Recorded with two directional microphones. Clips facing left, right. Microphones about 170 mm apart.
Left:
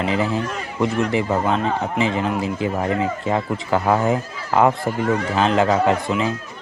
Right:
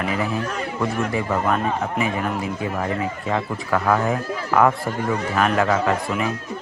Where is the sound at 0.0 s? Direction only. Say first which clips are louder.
Left 3 dB; 25° left (ahead or behind).